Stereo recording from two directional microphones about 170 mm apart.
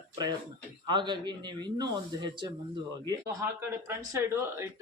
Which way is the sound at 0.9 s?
25° right (ahead or behind).